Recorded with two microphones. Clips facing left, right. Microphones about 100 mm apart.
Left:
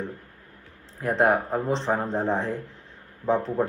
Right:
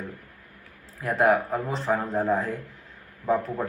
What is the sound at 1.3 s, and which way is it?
Speech, 35° left (ahead or behind).